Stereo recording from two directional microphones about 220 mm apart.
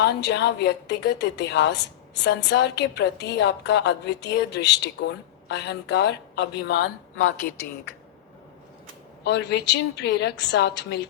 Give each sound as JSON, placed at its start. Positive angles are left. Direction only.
{"t": 0.0, "sound": "a woman's voice", "side_deg": 50}
{"t": 9.2, "sound": "a woman's voice", "side_deg": 50}